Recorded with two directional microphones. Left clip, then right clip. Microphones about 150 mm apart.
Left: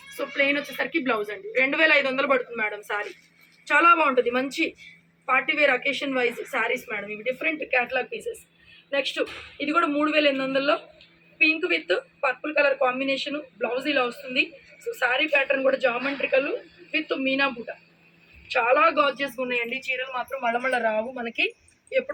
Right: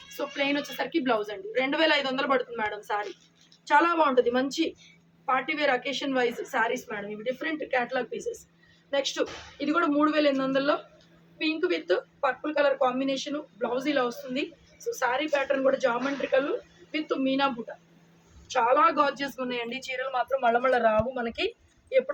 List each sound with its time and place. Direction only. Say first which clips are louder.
0.2 s a woman's voice: left 5 dB; 10° right (ahead or behind)
4.2 s speech: left 1 dB; centre (ahead or behind)
4.4 s a woman's voice: left 2 dB; 20° right (ahead or behind)
18.5 s speech: left 2 dB; 5° right (ahead or behind)
18.8 s a woman's voice: left 2 dB; 25° right (ahead or behind)